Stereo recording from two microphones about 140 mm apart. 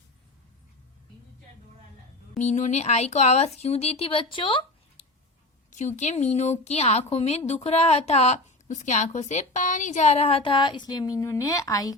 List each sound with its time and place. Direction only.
2.4 s a woman's voice: 55° left (ahead or behind); by 5.0 s 40° left (ahead or behind)
6.0 s a woman's voice: 55° left (ahead or behind); by 11.9 s 25° left (ahead or behind)